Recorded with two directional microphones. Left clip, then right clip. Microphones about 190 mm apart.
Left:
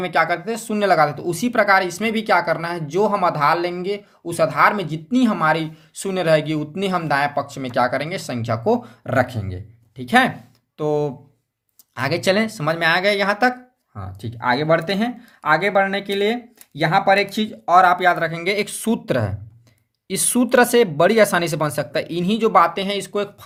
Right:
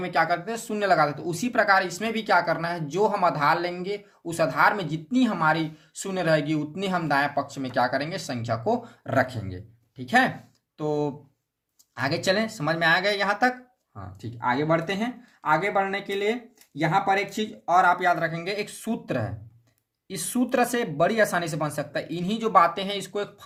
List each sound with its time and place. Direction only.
0.0 s speech: 35° left (ahead or behind)